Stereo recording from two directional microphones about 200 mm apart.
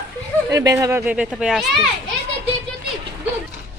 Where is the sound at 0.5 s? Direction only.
15° right (ahead or behind); by 1.9 s centre (ahead or behind).